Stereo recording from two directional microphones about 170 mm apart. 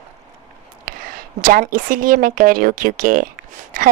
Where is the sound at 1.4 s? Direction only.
55° right (ahead or behind).